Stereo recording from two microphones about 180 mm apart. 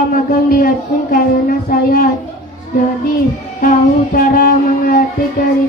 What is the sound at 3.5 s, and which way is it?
Speech, 55° left (ahead or behind).